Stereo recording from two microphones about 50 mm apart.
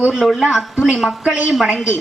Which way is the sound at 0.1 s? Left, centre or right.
Centre.